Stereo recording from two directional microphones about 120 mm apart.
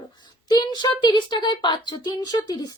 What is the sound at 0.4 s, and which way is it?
Speech, 35° left (ahead or behind).